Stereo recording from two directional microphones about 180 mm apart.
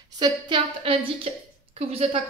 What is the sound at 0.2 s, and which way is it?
A woman's voice, 30° right (ahead or behind).